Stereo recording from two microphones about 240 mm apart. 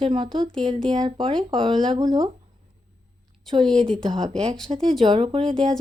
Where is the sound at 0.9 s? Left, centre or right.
Centre.